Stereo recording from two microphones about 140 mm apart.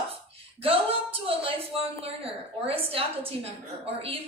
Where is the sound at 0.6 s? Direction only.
45° right (ahead or behind).